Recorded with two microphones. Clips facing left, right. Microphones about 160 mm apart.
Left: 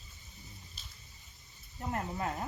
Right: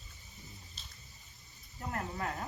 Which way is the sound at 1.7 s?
20° left (ahead or behind).